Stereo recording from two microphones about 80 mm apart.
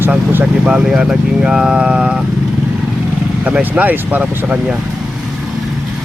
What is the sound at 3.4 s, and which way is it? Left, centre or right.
Speech, centre.